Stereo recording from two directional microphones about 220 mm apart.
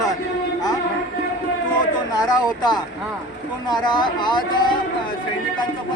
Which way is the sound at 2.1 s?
20° left (ahead or behind).